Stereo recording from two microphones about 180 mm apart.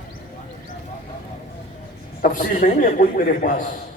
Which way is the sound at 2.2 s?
50° left (ahead or behind).